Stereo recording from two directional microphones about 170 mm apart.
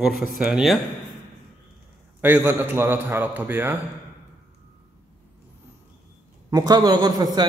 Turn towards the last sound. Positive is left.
turn(degrees=-25)  # may be behind; listen again after turning